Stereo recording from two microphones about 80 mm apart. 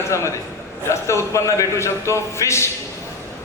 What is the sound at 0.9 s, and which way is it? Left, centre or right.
A man's voice, left.